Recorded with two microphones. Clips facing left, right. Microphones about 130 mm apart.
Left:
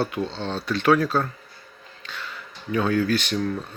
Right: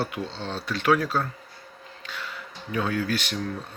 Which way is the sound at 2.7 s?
10° right (ahead or behind).